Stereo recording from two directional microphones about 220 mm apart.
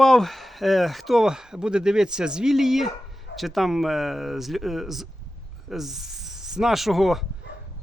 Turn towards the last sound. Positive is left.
turn(degrees=0)  # may be behind; listen again after turning